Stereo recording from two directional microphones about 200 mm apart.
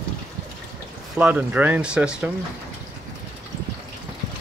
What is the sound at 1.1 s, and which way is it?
Speech, 5° right (ahead or behind).